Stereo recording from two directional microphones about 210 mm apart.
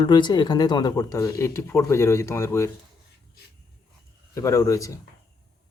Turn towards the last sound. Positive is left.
turn(degrees=15)  # may be behind; listen again after turning